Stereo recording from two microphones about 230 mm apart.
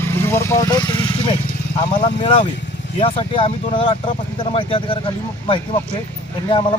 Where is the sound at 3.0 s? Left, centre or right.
Left.